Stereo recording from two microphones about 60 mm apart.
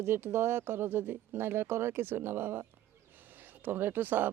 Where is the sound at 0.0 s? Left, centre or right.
Right.